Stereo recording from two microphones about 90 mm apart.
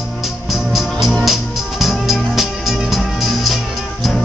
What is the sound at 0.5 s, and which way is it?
Music, centre (ahead or behind).